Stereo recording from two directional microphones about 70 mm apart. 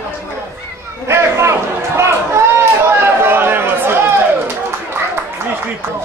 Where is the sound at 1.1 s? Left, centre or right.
Right.